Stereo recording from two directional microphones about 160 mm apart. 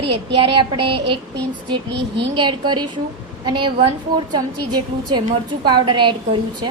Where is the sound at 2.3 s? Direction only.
30° right (ahead or behind).